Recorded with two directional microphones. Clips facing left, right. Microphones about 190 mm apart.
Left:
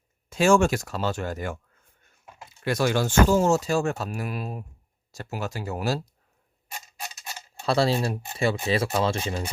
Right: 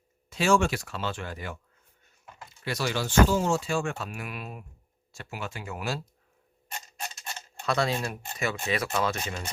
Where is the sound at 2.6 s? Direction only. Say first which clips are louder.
Left 6 dB; 50° left (ahead or behind).